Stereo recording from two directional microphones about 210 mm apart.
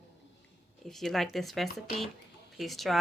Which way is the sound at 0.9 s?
Centre (ahead or behind).